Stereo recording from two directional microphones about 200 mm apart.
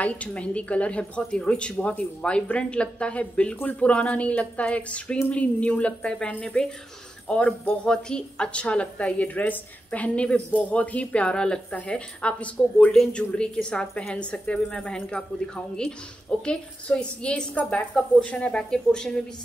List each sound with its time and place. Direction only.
0.0 s a woman's voice: 5° left (ahead or behind)